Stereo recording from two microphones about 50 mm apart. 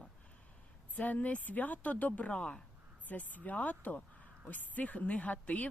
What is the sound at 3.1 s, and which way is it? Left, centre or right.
Speech, left.